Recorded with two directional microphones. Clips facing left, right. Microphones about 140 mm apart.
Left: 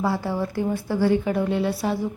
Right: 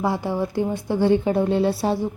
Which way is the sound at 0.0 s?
15° right (ahead or behind).